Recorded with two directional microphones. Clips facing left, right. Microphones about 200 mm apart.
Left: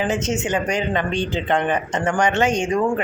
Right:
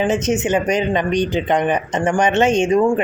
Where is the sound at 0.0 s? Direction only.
20° right (ahead or behind).